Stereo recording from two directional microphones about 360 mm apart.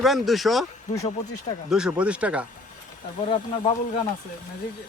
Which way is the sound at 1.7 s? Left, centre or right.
Centre.